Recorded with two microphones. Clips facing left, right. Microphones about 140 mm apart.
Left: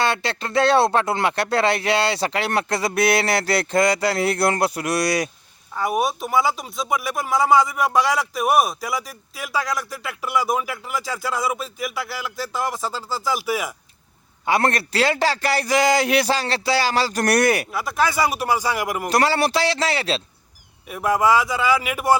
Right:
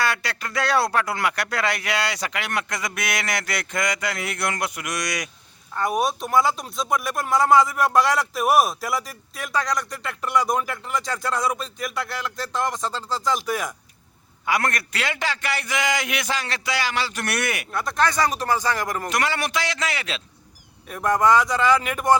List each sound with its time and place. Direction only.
0.0 s speech: 25° left (ahead or behind)
5.7 s speech: 5° left (ahead or behind)
14.4 s speech: 30° left (ahead or behind)
17.7 s speech: 5° left (ahead or behind)
19.0 s speech: 35° left (ahead or behind)
20.8 s speech: 5° left (ahead or behind)